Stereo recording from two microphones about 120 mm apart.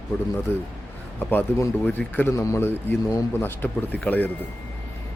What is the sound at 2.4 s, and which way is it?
A man's voice, 25° left (ahead or behind).